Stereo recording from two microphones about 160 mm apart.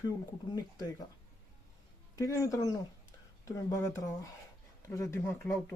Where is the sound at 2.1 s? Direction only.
20° left (ahead or behind).